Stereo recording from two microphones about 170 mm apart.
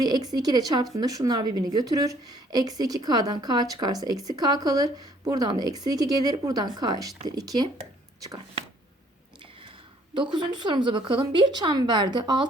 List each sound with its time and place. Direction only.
0.0 s a woman's voice: 25° right (ahead or behind)
10.3 s a woman's voice: 25° right (ahead or behind)